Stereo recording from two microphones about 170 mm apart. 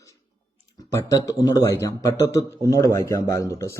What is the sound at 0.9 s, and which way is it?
A man's voice, 20° left (ahead or behind).